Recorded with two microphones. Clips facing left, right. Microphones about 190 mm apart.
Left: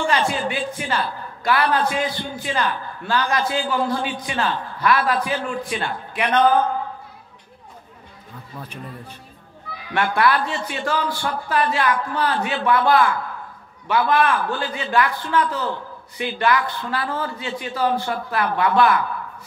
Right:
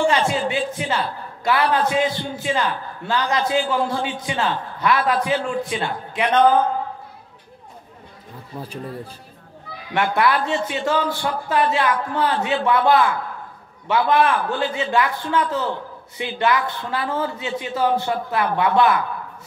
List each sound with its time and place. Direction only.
0.0 s a man's voice: 20° right (ahead or behind)
9.9 s a man's voice: 20° right (ahead or behind)